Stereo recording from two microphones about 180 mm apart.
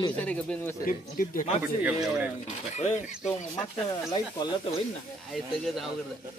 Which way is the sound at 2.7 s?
40° left (ahead or behind).